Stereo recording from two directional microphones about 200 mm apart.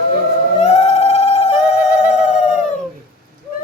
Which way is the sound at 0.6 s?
35° left (ahead or behind).